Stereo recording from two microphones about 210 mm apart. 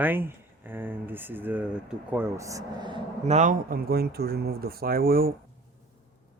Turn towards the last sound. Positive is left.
turn(degrees=-45)  # may be behind; listen again after turning